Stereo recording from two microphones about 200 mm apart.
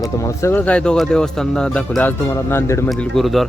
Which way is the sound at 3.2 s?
Centre (ahead or behind).